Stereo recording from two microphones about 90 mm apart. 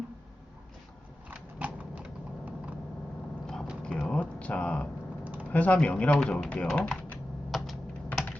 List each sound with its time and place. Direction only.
1.3 s a sound: 20° right (ahead or behind)
3.4 s a sound: 5° left (ahead or behind)
5.2 s typing: 20° right (ahead or behind)
5.5 s speech: 15° left (ahead or behind)
6.7 s typing: 10° left (ahead or behind)
7.5 s typing: centre (ahead or behind)